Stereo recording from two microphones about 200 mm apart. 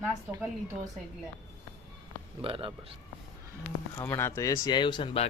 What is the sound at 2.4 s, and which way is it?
Speech, 25° right (ahead or behind).